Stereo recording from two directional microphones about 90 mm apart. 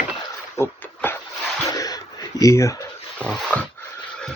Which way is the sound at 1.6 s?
40° left (ahead or behind).